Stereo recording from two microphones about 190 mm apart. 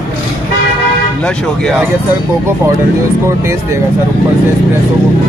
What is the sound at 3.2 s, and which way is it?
Speech, 15° right (ahead or behind).